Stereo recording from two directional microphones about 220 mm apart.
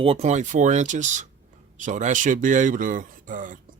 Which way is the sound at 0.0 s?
30° right (ahead or behind).